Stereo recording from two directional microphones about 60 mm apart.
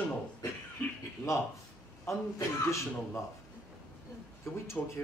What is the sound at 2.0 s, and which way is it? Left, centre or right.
Speech, left.